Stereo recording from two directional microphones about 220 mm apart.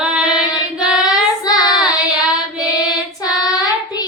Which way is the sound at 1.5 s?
15° left (ahead or behind).